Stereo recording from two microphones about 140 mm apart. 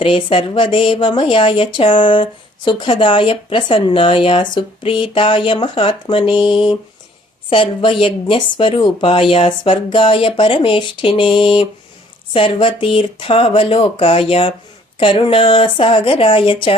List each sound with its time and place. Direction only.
0.0 s speech: 40° left (ahead or behind)